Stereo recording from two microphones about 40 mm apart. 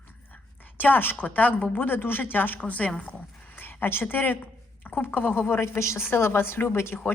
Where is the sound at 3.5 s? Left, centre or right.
Left.